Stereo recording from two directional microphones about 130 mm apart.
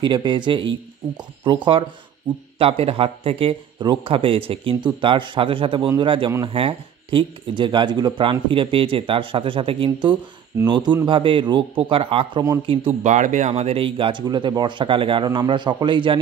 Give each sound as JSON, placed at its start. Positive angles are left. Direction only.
{"t": 0.0, "sound": "speech", "side_deg": -35}
{"t": 13.0, "sound": "speech", "side_deg": -65}
{"t": 14.2, "sound": "speech", "side_deg": -30}